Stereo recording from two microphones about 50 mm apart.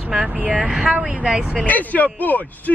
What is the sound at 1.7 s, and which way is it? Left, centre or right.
Speech, left.